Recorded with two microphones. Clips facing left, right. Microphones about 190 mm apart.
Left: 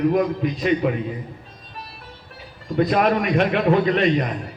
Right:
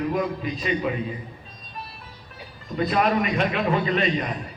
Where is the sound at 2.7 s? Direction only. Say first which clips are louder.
Left 3 dB; 60° left (ahead or behind).